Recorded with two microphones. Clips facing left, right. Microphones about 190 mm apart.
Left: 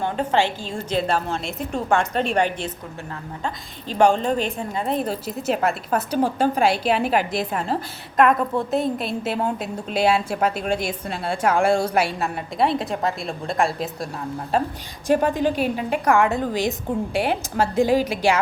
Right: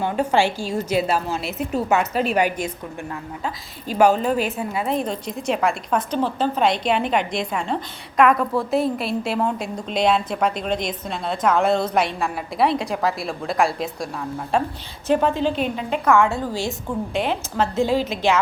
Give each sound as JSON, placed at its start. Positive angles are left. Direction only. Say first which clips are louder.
{"t": 0.0, "sound": "a woman's voice", "louder": "right 2 dB", "side_deg": -10}
{"t": 15.0, "sound": "a woman's voice", "louder": "even", "side_deg": 15}